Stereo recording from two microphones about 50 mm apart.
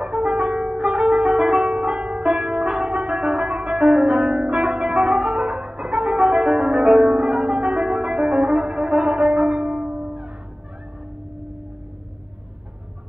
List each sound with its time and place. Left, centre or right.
0.0 s music: centre
10.0 s music: right